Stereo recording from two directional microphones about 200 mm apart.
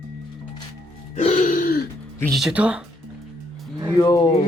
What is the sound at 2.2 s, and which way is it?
Speech, centre (ahead or behind).